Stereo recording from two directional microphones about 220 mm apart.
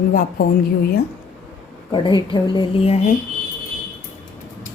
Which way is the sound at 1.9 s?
20° left (ahead or behind).